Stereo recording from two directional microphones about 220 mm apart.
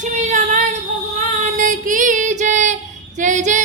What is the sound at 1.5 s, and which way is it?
Female singing, 35° right (ahead or behind).